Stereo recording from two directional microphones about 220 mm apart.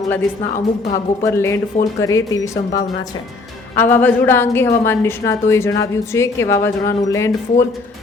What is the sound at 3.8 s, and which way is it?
A woman's voice, 10° left (ahead or behind).